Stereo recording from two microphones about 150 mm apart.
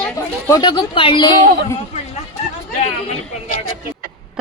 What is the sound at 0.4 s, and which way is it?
Speech, 25° left (ahead or behind).